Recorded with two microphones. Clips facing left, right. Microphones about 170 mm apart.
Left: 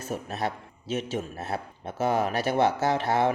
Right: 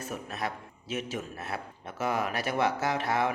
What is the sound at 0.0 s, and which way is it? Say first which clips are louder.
A man's voice: left 4 dB; 30° left (ahead or behind).